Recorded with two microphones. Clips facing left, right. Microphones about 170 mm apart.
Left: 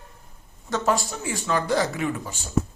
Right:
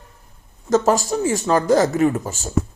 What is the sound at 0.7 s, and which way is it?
Speech, 40° right (ahead or behind).